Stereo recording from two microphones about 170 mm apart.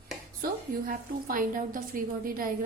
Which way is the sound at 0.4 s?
55° right (ahead or behind).